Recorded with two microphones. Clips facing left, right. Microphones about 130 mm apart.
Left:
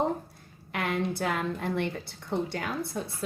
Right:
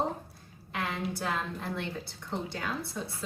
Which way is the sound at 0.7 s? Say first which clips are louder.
Left 4 dB; 65° left (ahead or behind).